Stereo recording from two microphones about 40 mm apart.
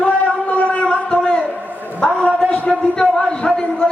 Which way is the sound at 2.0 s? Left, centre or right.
Left.